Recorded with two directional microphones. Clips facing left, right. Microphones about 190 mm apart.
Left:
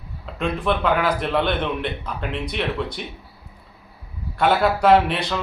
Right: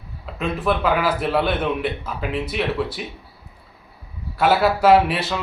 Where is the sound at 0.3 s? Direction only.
5° right (ahead or behind).